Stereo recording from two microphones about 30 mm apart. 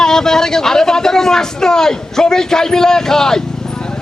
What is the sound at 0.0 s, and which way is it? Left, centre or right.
Speech, centre.